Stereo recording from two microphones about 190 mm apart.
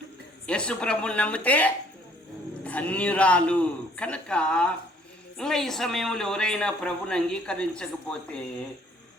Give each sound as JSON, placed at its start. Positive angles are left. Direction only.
{"t": 0.4, "sound": "a man's voice", "side_deg": 5}